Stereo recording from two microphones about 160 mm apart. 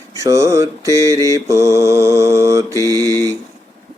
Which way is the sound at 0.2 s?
20° right (ahead or behind).